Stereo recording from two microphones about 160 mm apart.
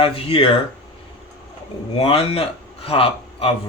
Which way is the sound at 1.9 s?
35° left (ahead or behind).